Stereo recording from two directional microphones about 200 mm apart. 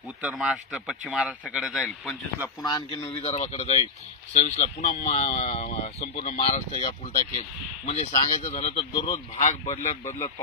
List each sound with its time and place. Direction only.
0.2 s speech: 5° right (ahead or behind)
2.6 s speech: 25° left (ahead or behind)